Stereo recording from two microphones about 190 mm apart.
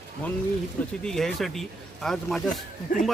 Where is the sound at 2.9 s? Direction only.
45° left (ahead or behind).